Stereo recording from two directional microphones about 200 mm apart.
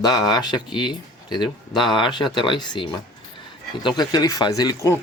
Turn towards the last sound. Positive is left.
turn(degrees=15)  # may be behind; listen again after turning